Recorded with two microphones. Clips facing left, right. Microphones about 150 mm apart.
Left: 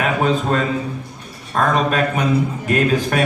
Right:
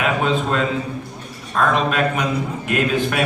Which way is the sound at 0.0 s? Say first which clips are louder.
Left 1 dB; 40° left (ahead or behind).